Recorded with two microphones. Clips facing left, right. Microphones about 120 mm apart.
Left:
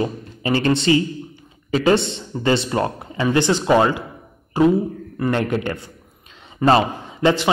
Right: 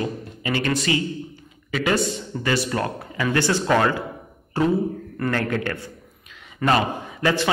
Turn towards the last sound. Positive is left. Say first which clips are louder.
# left 4 dB
turn(degrees=20)  # may be behind; listen again after turning